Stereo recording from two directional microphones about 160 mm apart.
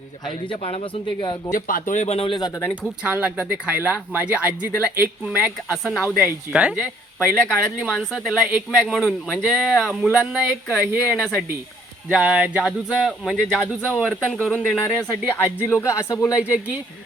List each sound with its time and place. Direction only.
0.3 s a man's voice: 30° left (ahead or behind)
1.5 s speech: 60° left (ahead or behind); by 2.5 s 30° left (ahead or behind)
3.0 s speech: 5° right (ahead or behind)
15.6 s speech: 20° left (ahead or behind)
16.4 s speech: 10° right (ahead or behind)